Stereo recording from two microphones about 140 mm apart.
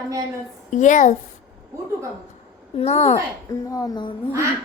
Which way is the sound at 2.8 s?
45° left (ahead or behind).